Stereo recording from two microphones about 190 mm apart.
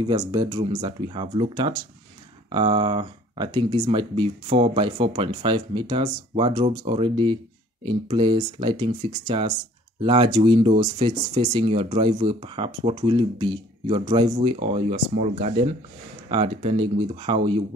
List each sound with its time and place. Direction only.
0.0 s speech: 20° right (ahead or behind)